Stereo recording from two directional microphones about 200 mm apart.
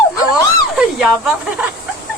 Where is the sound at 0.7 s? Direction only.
5° right (ahead or behind).